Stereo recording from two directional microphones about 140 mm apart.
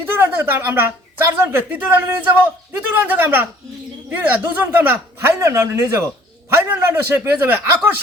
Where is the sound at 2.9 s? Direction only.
15° right (ahead or behind).